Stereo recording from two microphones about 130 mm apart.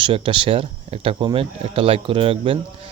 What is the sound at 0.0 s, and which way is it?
Speech, 40° right (ahead or behind).